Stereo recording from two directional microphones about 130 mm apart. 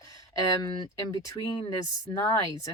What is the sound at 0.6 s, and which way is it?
Speech, 30° left (ahead or behind).